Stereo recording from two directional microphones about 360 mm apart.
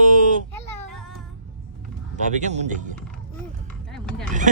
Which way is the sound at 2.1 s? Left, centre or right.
Centre.